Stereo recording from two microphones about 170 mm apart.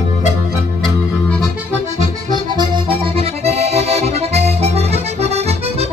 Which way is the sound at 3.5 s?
40° right (ahead or behind).